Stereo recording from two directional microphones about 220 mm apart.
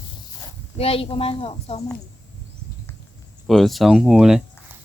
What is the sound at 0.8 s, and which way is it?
A woman's voice, 25° left (ahead or behind).